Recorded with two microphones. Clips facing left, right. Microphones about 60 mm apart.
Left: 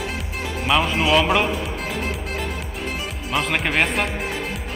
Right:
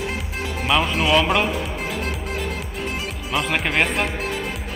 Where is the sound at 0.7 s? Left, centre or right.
Centre.